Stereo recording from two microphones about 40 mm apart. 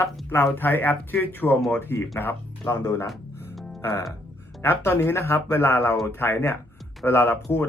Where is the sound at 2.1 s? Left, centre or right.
Left.